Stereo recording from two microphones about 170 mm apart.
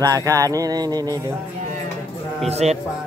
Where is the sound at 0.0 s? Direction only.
20° right (ahead or behind).